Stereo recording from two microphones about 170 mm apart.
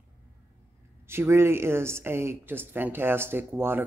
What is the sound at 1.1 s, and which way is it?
Speech, 15° right (ahead or behind).